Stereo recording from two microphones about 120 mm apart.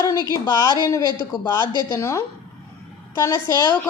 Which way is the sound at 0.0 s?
30° left (ahead or behind).